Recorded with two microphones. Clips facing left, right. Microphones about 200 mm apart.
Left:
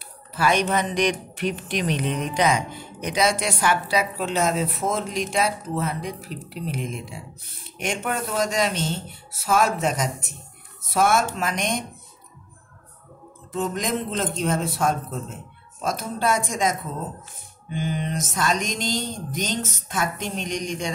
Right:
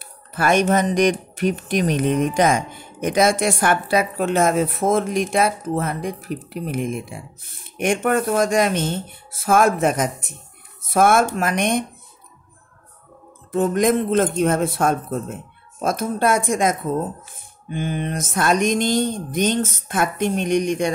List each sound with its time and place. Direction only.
0.0 s speech: 50° right (ahead or behind)
10.9 s mantra: 55° right (ahead or behind)
13.5 s mantra: 55° right (ahead or behind)